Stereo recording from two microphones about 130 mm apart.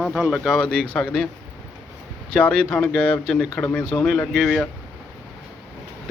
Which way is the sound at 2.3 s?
10° left (ahead or behind).